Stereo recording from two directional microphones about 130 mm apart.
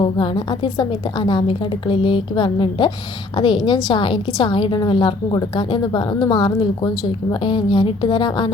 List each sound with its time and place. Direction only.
0.0 s a woman's voice: 35° left (ahead or behind)